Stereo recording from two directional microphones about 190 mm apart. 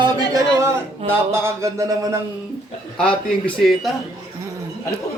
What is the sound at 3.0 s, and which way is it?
Speech, 5° left (ahead or behind).